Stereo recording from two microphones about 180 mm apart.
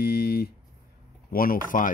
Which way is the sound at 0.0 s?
60° left (ahead or behind).